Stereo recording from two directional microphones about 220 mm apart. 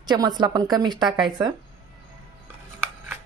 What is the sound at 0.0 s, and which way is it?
Speech, 20° right (ahead or behind).